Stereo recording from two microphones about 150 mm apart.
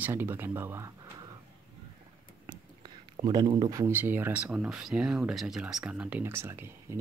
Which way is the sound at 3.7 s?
20° right (ahead or behind).